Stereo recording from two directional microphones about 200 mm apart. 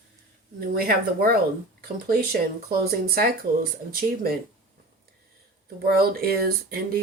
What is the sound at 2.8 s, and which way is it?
Speech, 50° right (ahead or behind).